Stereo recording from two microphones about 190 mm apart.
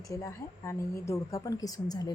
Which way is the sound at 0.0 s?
15° left (ahead or behind).